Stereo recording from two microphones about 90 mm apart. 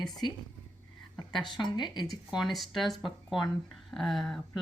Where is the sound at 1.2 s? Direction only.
55° left (ahead or behind).